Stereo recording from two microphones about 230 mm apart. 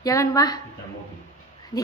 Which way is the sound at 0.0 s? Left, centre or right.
Centre.